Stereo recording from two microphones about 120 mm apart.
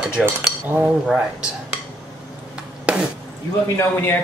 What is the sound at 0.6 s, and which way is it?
Speech, 15° right (ahead or behind).